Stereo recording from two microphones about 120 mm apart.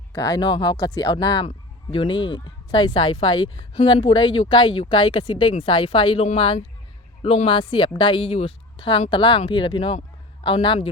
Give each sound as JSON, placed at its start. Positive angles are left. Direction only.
{"t": 0.1, "sound": "speech", "side_deg": 30}